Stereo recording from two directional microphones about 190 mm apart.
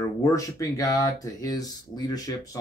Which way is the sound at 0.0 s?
15° left (ahead or behind).